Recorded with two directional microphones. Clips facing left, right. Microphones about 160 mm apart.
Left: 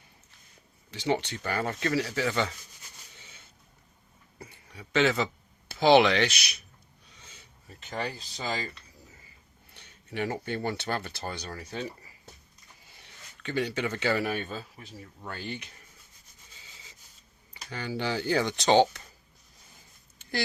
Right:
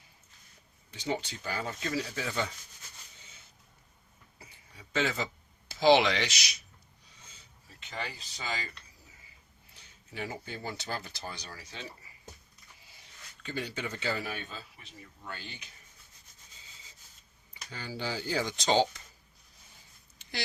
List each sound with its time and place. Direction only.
0.9 s speech: 85° left
4.7 s speech: 75° left (ahead or behind)
7.8 s speech: 40° left (ahead or behind)
9.7 s speech: 65° left (ahead or behind)
13.0 s speech: 70° left (ahead or behind)
17.5 s speech: 70° left (ahead or behind)